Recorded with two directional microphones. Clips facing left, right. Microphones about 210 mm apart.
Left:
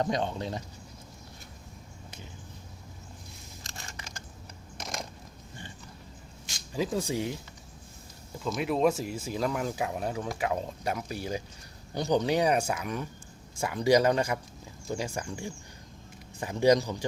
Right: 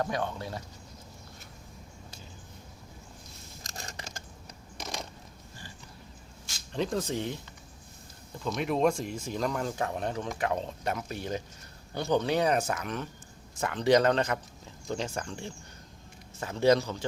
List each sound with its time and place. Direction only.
0.0 s speech: 20° left (ahead or behind)
3.6 s a sound: 40° right (ahead or behind)
4.8 s crushing: centre (ahead or behind)
6.7 s speech: 5° left (ahead or behind)
8.4 s speech: centre (ahead or behind)